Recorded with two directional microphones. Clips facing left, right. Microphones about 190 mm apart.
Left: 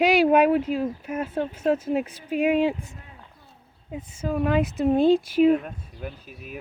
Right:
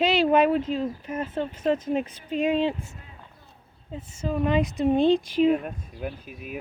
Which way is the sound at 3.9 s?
10° left (ahead or behind).